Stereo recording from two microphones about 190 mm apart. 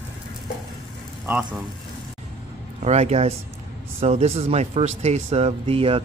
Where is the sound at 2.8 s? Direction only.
35° right (ahead or behind).